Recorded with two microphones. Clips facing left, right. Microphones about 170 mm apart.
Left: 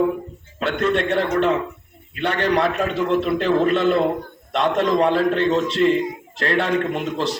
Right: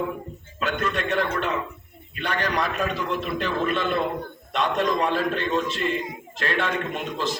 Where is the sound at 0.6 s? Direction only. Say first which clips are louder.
Left 6 dB; 65° left (ahead or behind).